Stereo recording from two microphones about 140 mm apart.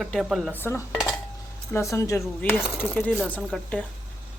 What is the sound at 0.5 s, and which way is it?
Speech, 15° left (ahead or behind).